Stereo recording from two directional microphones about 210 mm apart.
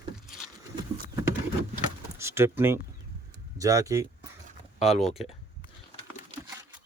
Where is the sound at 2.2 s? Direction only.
10° right (ahead or behind).